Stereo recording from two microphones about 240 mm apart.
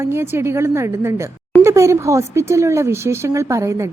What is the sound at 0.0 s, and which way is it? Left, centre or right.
Speech, centre.